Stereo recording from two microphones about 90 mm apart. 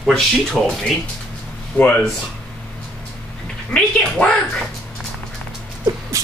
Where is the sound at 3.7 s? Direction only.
10° left (ahead or behind).